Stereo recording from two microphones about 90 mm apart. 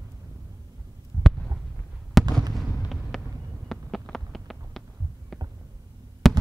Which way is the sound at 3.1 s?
Centre (ahead or behind).